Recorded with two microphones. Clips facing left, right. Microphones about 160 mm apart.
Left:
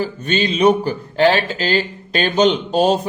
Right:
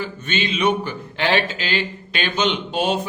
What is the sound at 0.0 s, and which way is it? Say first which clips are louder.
Speech: left 6 dB; 40° left (ahead or behind).